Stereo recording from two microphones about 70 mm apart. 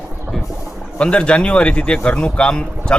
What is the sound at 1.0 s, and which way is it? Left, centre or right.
Speech, centre.